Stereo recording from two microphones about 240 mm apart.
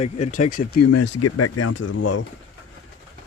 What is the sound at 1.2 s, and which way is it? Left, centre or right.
Speech, left.